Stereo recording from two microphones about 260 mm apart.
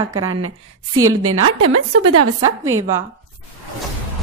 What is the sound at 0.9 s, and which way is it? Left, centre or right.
A woman's voice, right.